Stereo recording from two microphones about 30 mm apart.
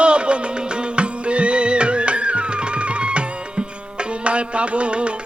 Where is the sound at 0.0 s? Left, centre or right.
Right.